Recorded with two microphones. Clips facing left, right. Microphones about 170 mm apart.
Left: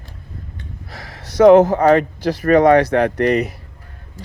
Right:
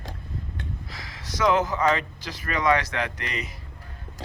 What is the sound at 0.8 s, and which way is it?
Speech, 60° left (ahead or behind).